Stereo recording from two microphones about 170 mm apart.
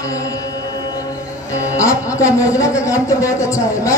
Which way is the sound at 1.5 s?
20° left (ahead or behind).